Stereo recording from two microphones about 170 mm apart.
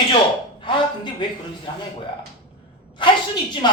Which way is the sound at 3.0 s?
25° left (ahead or behind).